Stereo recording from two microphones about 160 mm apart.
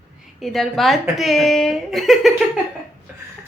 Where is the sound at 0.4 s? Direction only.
Centre (ahead or behind).